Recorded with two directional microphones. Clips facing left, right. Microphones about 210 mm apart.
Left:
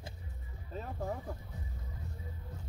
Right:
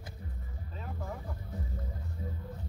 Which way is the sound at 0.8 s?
35° left (ahead or behind).